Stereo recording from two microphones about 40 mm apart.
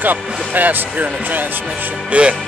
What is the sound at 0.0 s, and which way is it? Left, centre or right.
Speech, right.